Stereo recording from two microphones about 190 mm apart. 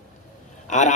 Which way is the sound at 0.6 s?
40° left (ahead or behind).